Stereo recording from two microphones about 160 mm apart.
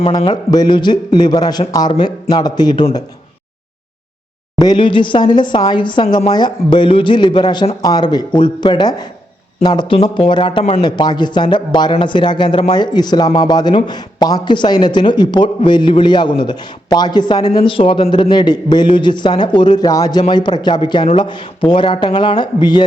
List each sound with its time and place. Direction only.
0.3 s a man's voice: 25° left (ahead or behind)
4.5 s a man's voice: 25° left (ahead or behind)
10.8 s a man's voice: 25° left (ahead or behind)